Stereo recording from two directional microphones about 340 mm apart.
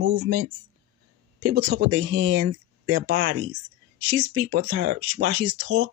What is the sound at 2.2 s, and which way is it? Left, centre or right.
Speech, right.